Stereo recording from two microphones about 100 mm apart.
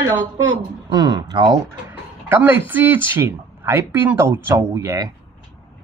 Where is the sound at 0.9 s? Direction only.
40° right (ahead or behind).